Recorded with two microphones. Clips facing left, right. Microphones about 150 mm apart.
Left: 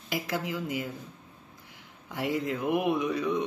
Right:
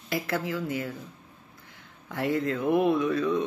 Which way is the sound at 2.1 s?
15° left (ahead or behind).